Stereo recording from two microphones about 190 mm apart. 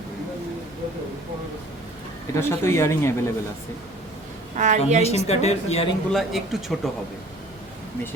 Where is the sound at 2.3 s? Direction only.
15° left (ahead or behind).